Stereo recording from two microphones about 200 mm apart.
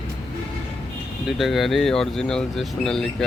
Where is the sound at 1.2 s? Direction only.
Centre (ahead or behind).